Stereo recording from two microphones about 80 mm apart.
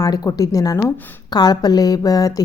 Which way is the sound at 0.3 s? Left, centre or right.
Left.